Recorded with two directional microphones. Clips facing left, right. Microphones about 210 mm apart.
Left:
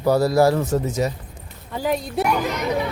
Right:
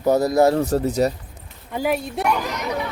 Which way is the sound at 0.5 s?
35° right (ahead or behind).